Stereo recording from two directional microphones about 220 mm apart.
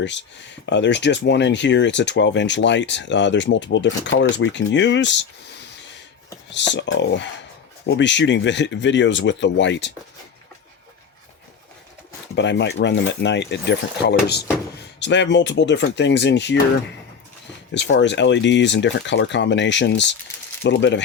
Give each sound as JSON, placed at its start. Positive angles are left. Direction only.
{"t": 0.0, "sound": "speech", "side_deg": 55}
{"t": 6.5, "sound": "speech", "side_deg": 55}
{"t": 12.4, "sound": "speech", "side_deg": 55}
{"t": 17.7, "sound": "speech", "side_deg": 55}